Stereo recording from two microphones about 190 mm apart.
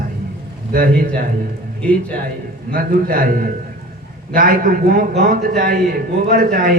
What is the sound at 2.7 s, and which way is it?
Speech, 50° right (ahead or behind).